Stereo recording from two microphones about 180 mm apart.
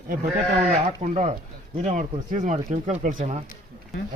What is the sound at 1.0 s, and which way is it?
Speech, 40° right (ahead or behind).